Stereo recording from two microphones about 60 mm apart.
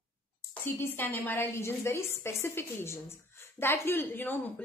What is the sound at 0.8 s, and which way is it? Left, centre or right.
Speech, left.